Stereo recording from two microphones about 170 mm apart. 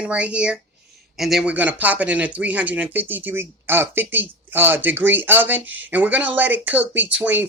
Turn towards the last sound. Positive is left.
turn(degrees=-10)  # may be behind; listen again after turning